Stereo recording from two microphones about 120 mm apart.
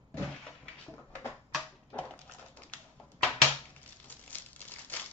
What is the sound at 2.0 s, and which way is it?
Dog, 10° left (ahead or behind).